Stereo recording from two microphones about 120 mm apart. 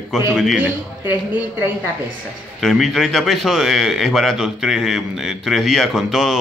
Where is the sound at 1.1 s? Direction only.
15° right (ahead or behind).